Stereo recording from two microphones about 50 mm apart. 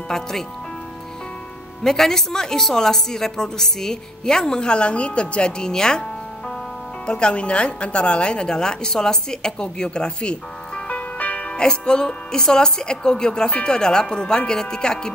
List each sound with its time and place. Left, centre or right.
0.1 s speech: centre
1.8 s speech: centre
7.1 s speech: centre
10.9 s music: left
11.5 s speech: centre